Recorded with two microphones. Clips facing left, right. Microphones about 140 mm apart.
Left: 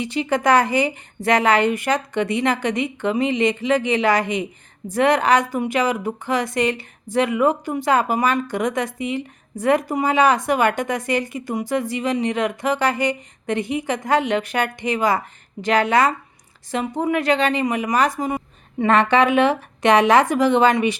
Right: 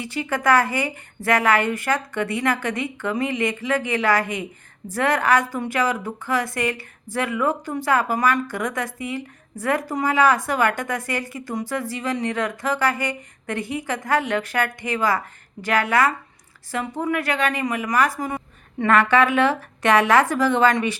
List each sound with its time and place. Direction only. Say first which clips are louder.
0.0 s a woman's voice: left 3 dB; 20° left (ahead or behind)